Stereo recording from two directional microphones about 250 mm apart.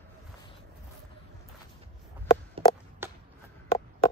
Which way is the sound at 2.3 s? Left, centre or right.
Centre.